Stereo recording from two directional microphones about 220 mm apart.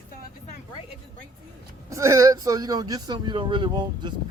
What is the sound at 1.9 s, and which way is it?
Speech, 15° right (ahead or behind).